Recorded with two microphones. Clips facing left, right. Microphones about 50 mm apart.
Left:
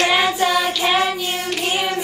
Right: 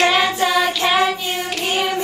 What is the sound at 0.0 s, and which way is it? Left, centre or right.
Child singing, centre.